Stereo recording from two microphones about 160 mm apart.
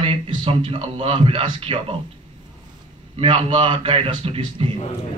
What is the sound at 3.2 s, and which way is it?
A man's voice, 35° right (ahead or behind).